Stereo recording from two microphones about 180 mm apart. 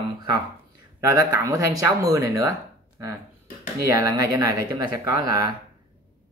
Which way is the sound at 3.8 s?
20° right (ahead or behind).